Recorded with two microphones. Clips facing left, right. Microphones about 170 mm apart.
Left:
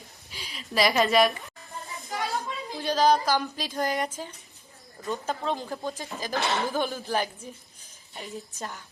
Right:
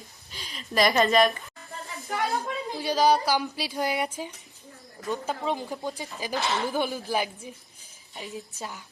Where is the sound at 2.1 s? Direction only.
60° right (ahead or behind).